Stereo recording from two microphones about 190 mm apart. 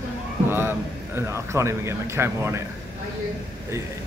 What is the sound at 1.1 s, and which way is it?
Speech, 15° right (ahead or behind).